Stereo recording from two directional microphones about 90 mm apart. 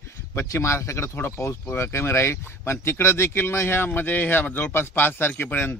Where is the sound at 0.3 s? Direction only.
30° left (ahead or behind).